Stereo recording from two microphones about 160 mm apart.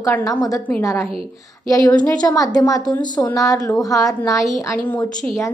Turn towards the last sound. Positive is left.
turn(degrees=10)  # may be behind; listen again after turning